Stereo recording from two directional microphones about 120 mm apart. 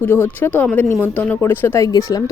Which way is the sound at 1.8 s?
30° left (ahead or behind).